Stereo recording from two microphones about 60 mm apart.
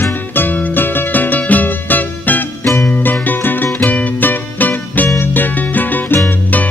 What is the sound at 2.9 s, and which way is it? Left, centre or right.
Music, left.